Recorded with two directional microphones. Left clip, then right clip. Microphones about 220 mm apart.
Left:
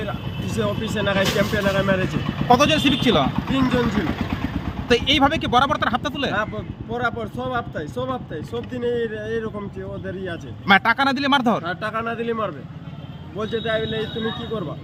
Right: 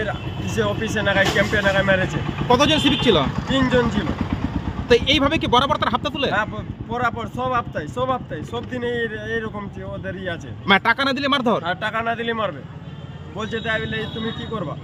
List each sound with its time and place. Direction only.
0.6 s speech: 5° right (ahead or behind)
4.9 s speech: centre (ahead or behind)